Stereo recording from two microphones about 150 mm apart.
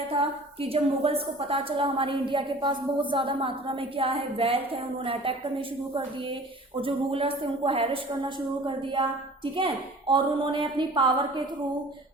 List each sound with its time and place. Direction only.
0.1 s a woman's voice: 40° right (ahead or behind)